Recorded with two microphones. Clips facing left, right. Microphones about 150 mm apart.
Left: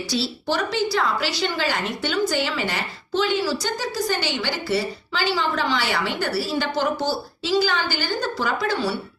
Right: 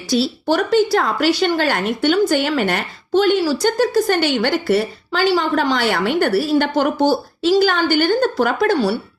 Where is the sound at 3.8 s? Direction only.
55° right (ahead or behind).